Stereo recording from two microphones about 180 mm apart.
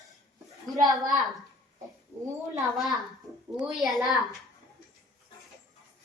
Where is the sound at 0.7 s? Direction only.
20° right (ahead or behind).